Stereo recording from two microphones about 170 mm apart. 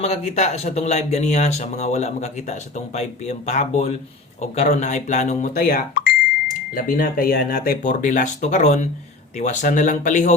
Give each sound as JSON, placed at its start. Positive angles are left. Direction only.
{"t": 0.0, "sound": "speech", "side_deg": 40}